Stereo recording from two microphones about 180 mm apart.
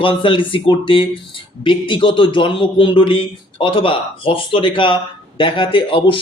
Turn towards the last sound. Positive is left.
turn(degrees=30)  # may be behind; listen again after turning